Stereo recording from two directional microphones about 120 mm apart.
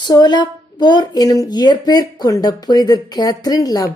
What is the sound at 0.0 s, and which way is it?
A woman's voice, 35° left (ahead or behind).